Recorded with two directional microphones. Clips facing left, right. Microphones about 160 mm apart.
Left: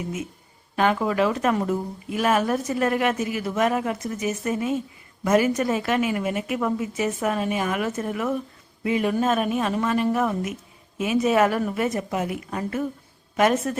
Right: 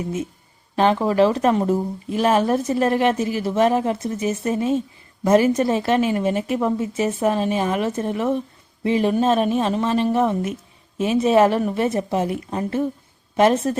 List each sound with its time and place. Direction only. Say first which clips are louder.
0.0 s speech: right 4 dB; 30° right (ahead or behind)